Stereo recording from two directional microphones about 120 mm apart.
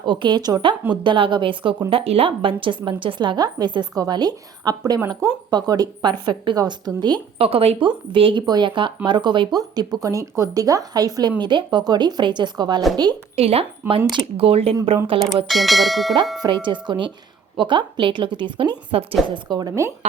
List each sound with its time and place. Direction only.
0.0 s speech: 40° right (ahead or behind)
7.3 s speech: 55° right (ahead or behind); by 12.8 s 35° right (ahead or behind)
13.3 s speech: 55° right (ahead or behind)
15.4 s speech: centre (ahead or behind)
16.4 s speech: 40° right (ahead or behind)
18.9 s speech: 55° right (ahead or behind)
19.3 s speech: 35° right (ahead or behind)